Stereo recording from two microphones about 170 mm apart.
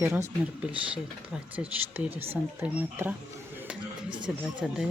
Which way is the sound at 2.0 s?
35° right (ahead or behind).